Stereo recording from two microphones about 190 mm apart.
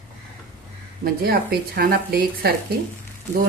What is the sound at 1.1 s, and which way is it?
Speech, 50° right (ahead or behind).